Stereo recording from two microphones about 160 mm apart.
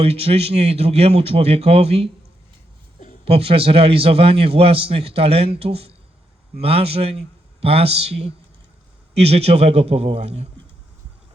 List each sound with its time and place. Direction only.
0.0 s a man's voice: 40° right (ahead or behind)
3.2 s a man's voice: 35° right (ahead or behind)